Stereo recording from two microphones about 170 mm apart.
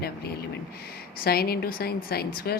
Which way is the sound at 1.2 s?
65° left (ahead or behind).